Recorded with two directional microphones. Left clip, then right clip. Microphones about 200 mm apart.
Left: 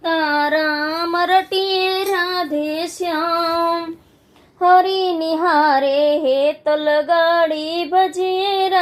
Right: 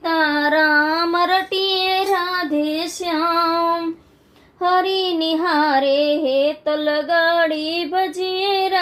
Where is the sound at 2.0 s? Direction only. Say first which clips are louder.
Even; 35° left (ahead or behind).